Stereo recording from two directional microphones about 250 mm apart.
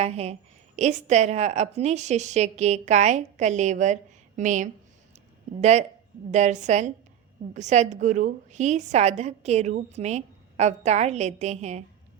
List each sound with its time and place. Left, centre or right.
0.0 s a woman's voice: right